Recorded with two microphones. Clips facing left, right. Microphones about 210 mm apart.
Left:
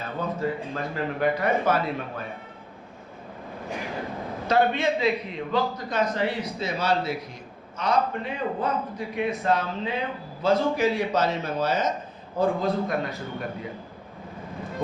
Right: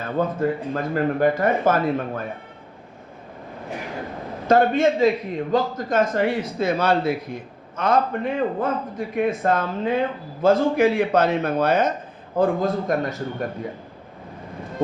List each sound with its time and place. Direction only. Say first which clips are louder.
0.0 s a man's voice: right 6 dB; 50° right (ahead or behind)
4.4 s a man's voice: right 5 dB; 45° right (ahead or behind)
12.4 s a man's voice: right 3 dB; 45° right (ahead or behind)